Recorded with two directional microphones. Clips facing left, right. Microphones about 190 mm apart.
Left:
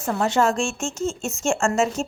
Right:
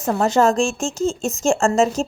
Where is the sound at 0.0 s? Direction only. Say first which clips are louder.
Right 4 dB; 40° right (ahead or behind).